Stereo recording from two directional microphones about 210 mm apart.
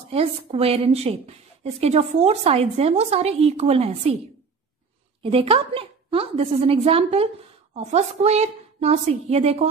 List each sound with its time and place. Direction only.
0.1 s a woman's voice: 30° right (ahead or behind)
5.2 s a woman's voice: 25° right (ahead or behind)